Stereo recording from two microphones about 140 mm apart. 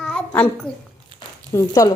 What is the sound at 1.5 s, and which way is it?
Speech, 25° left (ahead or behind).